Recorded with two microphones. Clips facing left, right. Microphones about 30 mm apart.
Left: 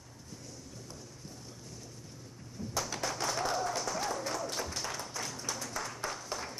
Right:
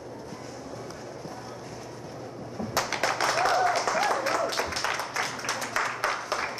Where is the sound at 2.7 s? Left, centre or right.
Right.